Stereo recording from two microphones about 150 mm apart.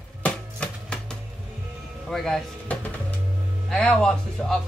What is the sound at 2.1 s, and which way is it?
Drawer open or close, 5° left (ahead or behind).